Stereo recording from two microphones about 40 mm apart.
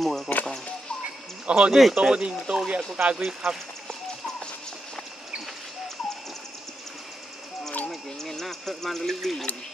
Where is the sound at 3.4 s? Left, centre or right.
Centre.